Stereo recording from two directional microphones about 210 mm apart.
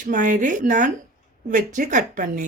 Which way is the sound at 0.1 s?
40° right (ahead or behind).